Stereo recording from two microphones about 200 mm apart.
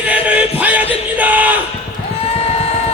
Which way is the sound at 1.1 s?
10° right (ahead or behind).